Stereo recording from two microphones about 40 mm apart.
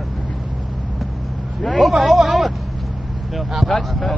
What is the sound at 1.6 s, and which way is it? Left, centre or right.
Speech, centre.